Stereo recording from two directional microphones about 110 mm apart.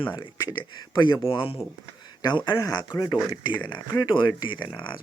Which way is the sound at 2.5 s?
35° left (ahead or behind).